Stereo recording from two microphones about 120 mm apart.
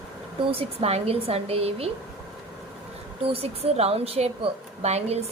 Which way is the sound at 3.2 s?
55° right (ahead or behind).